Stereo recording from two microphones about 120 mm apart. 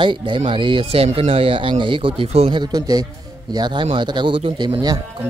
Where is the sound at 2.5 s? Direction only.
35° right (ahead or behind).